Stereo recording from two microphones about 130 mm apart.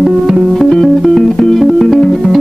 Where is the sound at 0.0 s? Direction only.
5° right (ahead or behind).